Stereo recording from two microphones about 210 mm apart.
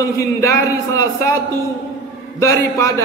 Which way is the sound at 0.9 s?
15° left (ahead or behind).